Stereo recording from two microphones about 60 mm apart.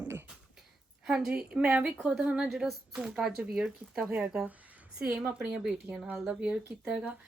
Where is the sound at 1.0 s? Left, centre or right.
Centre.